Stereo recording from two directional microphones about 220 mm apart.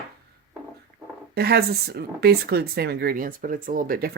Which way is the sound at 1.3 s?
45° right (ahead or behind).